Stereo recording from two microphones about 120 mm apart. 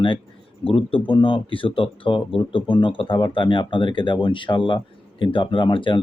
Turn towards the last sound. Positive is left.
turn(degrees=45)  # may be behind; listen again after turning